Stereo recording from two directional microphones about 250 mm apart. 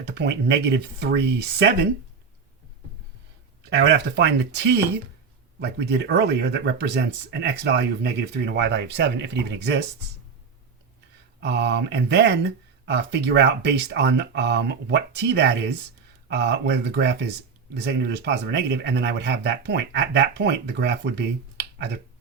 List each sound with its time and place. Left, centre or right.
0.0 s a man's voice: right
3.7 s a man's voice: right
11.3 s a man's voice: right